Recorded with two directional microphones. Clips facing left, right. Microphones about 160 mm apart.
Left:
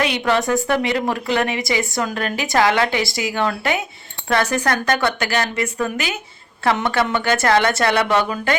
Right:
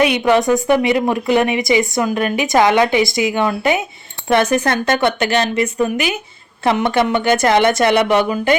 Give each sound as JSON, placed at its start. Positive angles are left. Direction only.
{"t": 0.0, "sound": "a woman's voice", "side_deg": -15}